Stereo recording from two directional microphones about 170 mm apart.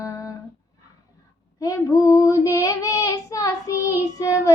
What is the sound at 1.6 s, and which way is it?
Child singing, 20° left (ahead or behind).